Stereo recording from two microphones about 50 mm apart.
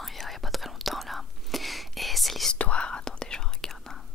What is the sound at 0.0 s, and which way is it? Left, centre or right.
Whispering, centre.